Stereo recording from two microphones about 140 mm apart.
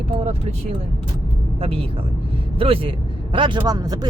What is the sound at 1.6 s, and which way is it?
A man's voice, 40° right (ahead or behind).